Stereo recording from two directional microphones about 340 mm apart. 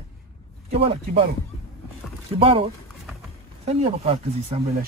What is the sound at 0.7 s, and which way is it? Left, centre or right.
Speech, centre.